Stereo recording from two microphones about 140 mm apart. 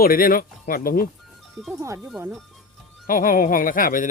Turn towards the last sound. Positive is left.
turn(degrees=75)  # may be behind; listen again after turning